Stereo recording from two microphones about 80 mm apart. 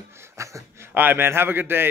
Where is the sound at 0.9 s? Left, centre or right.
Right.